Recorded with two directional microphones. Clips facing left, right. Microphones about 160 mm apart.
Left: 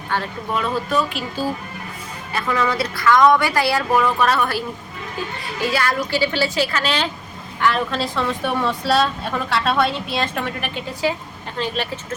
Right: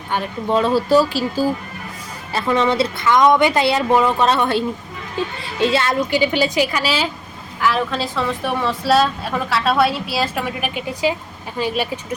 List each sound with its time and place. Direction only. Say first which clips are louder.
0.5 s speech: right 7 dB; 30° right (ahead or behind)
2.3 s a woman's voice: right 4 dB; 25° right (ahead or behind); by 11.9 s 10° right (ahead or behind)